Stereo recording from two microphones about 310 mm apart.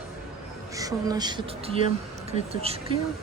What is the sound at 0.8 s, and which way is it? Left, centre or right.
Speech, centre.